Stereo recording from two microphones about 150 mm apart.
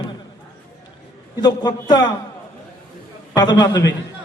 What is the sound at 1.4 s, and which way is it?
Speech, 30° left (ahead or behind).